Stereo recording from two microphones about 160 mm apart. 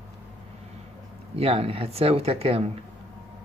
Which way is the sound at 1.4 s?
40° right (ahead or behind).